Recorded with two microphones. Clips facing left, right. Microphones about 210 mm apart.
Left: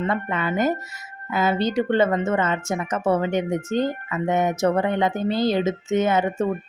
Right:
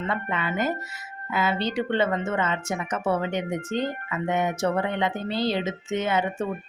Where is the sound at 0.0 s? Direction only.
45° left (ahead or behind).